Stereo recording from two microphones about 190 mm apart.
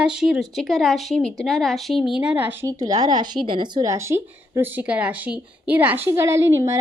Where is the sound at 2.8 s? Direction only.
20° right (ahead or behind).